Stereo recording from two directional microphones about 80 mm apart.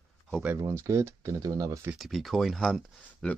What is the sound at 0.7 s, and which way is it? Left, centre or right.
Speech, right.